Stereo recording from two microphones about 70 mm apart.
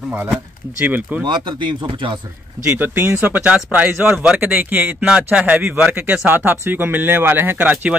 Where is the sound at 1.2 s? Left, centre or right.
Right.